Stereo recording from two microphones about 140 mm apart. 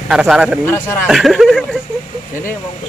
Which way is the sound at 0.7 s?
15° left (ahead or behind).